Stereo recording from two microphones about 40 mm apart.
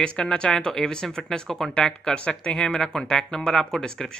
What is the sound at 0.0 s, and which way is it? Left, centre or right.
Speech, left.